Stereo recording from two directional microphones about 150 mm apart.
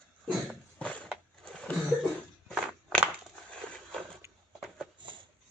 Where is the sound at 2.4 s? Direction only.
5° left (ahead or behind).